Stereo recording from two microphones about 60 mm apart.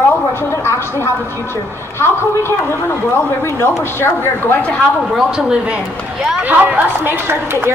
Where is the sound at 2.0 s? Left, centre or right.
Left.